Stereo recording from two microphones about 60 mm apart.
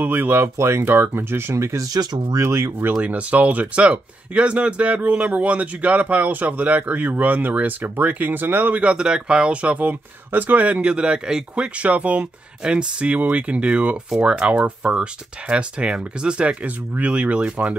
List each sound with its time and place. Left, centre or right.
0.0 s speech: right
1.9 s speech: right
2.4 s speech: right
2.8 s speech: right
8.9 s speech: centre; by 10.8 s right
10.8 s speech: centre